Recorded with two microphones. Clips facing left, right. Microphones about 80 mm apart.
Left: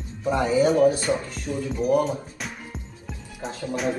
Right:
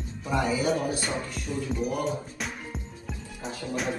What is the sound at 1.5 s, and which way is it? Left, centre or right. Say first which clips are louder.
Speech: left 4 dB; centre.